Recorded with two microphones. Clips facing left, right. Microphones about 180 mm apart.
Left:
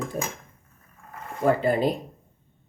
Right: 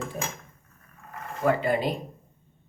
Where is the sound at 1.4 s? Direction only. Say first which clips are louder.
Left 3 dB; 35° left (ahead or behind).